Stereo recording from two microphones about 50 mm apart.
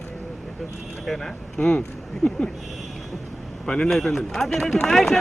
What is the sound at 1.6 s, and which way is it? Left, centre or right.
Speech, left.